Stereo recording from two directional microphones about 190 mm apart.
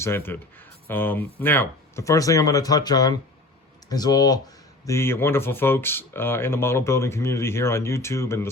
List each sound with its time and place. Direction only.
0.0 s speech: 10° left (ahead or behind)